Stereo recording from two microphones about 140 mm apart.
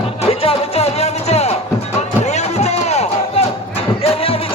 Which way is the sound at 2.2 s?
55° left (ahead or behind).